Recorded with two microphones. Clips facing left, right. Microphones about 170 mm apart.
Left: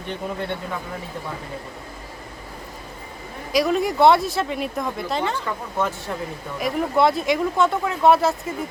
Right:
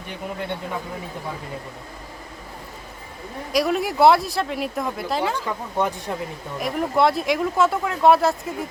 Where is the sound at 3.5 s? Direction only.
Centre (ahead or behind).